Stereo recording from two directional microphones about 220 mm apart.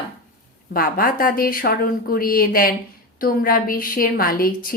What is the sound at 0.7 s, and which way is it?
Speech, 40° left (ahead or behind).